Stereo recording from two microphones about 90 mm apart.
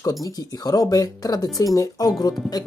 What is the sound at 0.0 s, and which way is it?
Speech, 40° left (ahead or behind).